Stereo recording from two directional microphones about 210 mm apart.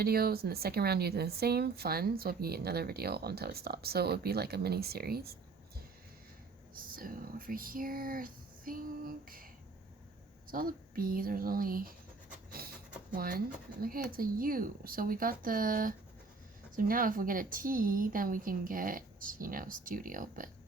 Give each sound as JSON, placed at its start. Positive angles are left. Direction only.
{"t": 0.0, "sound": "speech", "side_deg": -45}
{"t": 6.7, "sound": "speech", "side_deg": -45}
{"t": 10.5, "sound": "speech", "side_deg": -40}
{"t": 12.5, "sound": "pant", "side_deg": -45}
{"t": 13.1, "sound": "speech", "side_deg": -40}